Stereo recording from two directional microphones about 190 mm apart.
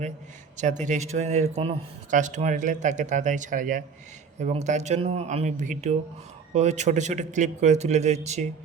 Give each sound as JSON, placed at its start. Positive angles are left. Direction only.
{"t": 0.5, "sound": "speech", "side_deg": -40}